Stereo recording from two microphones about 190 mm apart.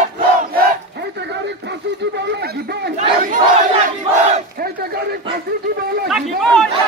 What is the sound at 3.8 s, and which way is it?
Battle cry, 50° right (ahead or behind).